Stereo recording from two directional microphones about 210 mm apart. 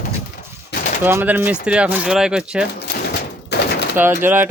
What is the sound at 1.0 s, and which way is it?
Speech, 10° right (ahead or behind).